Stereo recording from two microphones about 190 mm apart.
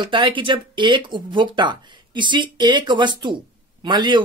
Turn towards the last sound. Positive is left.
turn(degrees=-25)  # may be behind; listen again after turning